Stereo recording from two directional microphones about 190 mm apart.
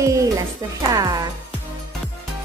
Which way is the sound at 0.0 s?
15° right (ahead or behind).